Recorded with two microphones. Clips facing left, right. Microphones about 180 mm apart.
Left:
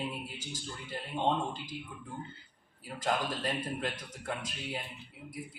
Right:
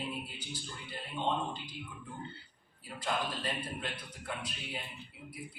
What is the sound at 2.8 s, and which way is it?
A man's voice, 40° left (ahead or behind).